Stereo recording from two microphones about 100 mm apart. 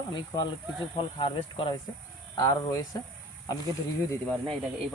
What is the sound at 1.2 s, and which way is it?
Speech, 60° left (ahead or behind).